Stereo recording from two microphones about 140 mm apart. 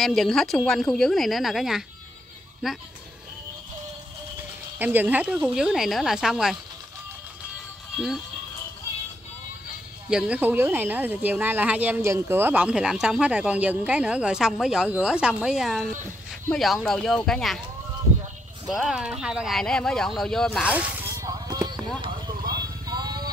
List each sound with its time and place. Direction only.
0.0 s speech: centre (ahead or behind)
4.7 s speech: 15° right (ahead or behind)
10.0 s speech: 5° right (ahead or behind)
18.7 s speech: 5° right (ahead or behind)
20.6 s speech: 10° right (ahead or behind)
21.2 s music: 25° right (ahead or behind)